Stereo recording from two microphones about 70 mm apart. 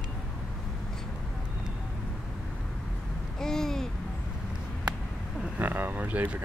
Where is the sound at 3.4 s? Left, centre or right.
Centre.